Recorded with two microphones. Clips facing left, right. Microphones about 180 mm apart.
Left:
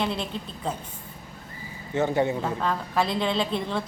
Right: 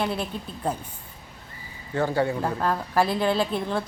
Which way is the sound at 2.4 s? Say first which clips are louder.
Right 2 dB; 5° right (ahead or behind).